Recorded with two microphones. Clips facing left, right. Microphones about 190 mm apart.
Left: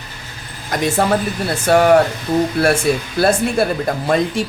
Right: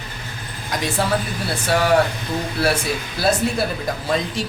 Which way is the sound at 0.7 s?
50° left (ahead or behind).